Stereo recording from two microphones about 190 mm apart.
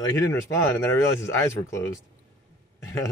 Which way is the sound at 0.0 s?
15° left (ahead or behind).